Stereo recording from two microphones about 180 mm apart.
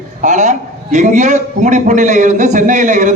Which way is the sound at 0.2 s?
40° right (ahead or behind).